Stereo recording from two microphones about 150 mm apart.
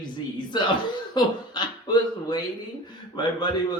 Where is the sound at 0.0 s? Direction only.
30° left (ahead or behind).